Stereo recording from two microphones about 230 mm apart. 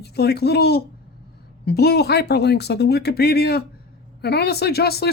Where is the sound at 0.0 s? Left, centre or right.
Left.